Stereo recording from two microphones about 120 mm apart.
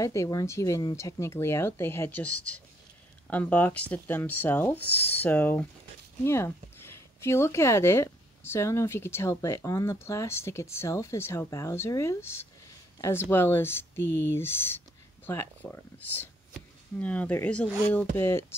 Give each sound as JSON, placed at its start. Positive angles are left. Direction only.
{"t": 0.0, "sound": "speech", "side_deg": 25}